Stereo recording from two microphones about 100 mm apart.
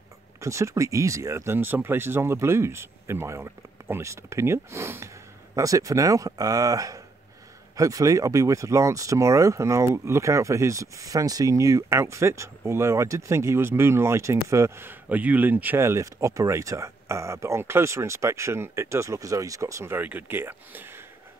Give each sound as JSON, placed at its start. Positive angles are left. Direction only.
{"t": 0.4, "sound": "speech", "side_deg": -30}
{"t": 20.0, "sound": "speech", "side_deg": -15}